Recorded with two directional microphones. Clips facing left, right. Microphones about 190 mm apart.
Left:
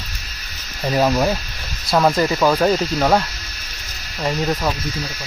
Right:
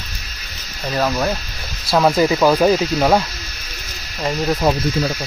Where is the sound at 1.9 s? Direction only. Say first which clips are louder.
Right 2 dB; 5° right (ahead or behind).